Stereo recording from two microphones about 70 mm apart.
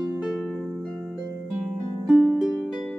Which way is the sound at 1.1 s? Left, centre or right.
Centre.